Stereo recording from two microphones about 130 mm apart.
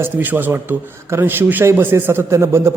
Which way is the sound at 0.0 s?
15° right (ahead or behind).